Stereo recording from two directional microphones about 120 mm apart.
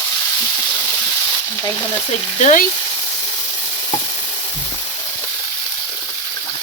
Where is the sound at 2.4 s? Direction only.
80° left.